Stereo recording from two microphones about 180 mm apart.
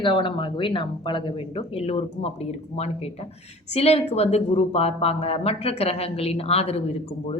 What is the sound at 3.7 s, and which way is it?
A woman's voice, 35° left (ahead or behind).